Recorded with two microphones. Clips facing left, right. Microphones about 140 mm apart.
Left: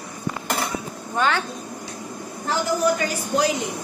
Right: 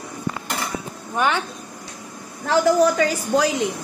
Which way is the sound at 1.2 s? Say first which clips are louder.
Right 1 dB; 15° right (ahead or behind).